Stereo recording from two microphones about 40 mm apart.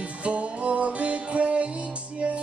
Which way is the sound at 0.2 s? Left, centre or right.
Right.